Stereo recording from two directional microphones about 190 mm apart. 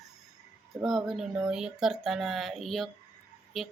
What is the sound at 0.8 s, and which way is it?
Speech, centre (ahead or behind).